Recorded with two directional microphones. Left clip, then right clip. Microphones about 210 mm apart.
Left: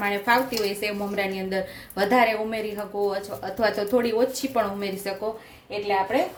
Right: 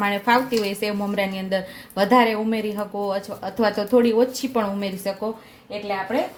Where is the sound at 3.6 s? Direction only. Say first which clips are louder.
Right 4 dB; 20° right (ahead or behind).